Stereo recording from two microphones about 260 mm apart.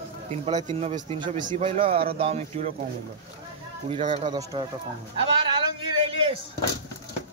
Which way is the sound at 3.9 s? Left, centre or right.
Right.